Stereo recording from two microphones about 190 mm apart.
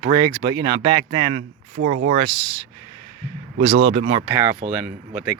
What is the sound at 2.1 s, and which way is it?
Speech, 25° right (ahead or behind).